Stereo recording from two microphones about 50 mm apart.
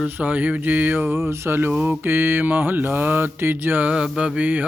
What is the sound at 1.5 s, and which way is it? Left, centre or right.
Mantra, right.